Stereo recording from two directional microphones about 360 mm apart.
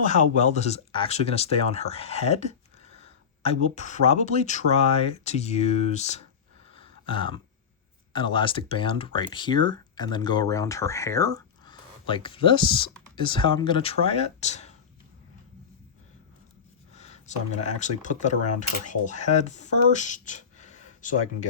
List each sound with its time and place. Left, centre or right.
0.0 s speech: centre
6.7 s a sound: centre
8.1 s speech: centre
16.9 s speech: centre